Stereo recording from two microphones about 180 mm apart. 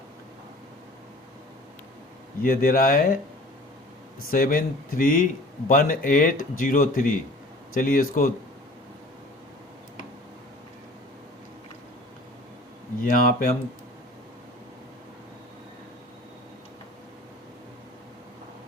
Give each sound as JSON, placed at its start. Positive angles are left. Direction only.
{"t": 2.4, "sound": "a man's voice", "side_deg": 55}
{"t": 4.3, "sound": "a man's voice", "side_deg": 50}
{"t": 13.0, "sound": "a man's voice", "side_deg": 50}